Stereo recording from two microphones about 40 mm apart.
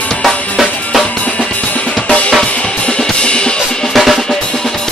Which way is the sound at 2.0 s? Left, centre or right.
Left.